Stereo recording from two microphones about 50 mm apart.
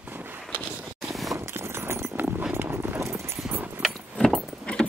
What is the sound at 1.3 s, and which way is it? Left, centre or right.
Horse, right.